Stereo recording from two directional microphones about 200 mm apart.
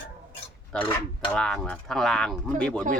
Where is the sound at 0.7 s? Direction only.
5° left (ahead or behind).